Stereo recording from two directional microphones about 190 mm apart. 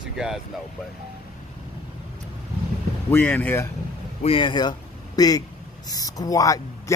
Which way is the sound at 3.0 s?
10° left (ahead or behind).